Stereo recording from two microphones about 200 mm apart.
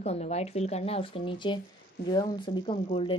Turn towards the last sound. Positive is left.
turn(degrees=25)  # may be behind; listen again after turning